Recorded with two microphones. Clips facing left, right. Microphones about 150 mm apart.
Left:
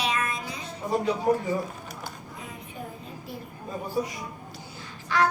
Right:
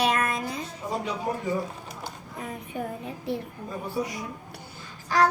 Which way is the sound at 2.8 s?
65° right (ahead or behind).